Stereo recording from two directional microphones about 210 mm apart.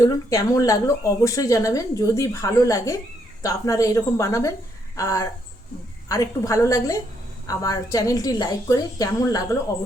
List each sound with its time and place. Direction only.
0.0 s speech: 15° left (ahead or behind)